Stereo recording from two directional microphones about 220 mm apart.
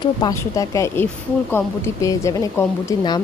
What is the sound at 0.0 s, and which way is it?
Speech, 15° left (ahead or behind).